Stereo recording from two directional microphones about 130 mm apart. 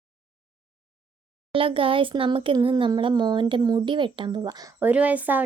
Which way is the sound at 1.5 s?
45° right (ahead or behind).